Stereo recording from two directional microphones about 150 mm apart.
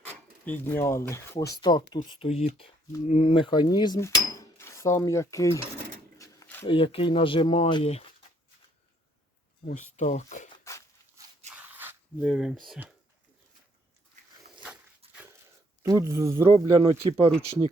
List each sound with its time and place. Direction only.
0.0 s speech: 10° left (ahead or behind); by 2.0 s 30° left (ahead or behind)
2.0 s speech: 40° left (ahead or behind); by 5.6 s 20° left (ahead or behind)
6.1 s a sound: 20° left (ahead or behind)
6.7 s speech: 35° left (ahead or behind)
9.6 s speech: 50° left (ahead or behind)
10.6 s dog: 20° left (ahead or behind)
11.5 s a sound: 15° right (ahead or behind)
12.2 s speech: centre (ahead or behind)
14.5 s dog: 5° right (ahead or behind)
15.8 s speech: 20° right (ahead or behind)
16.8 s speech: 40° right (ahead or behind)